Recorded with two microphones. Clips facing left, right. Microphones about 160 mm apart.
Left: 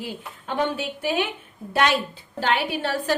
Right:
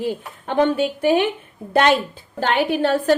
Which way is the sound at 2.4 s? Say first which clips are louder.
Right 5 dB; 50° right (ahead or behind).